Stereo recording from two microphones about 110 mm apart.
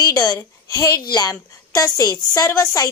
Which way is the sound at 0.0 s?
35° left (ahead or behind).